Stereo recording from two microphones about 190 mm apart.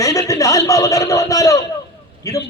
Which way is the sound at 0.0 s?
15° left (ahead or behind).